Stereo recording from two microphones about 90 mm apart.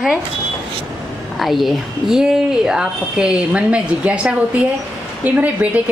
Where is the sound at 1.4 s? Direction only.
Centre (ahead or behind); by 5.7 s 15° right (ahead or behind).